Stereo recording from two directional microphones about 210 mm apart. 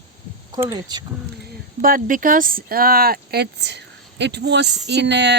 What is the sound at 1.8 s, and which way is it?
Speech, 40° right (ahead or behind).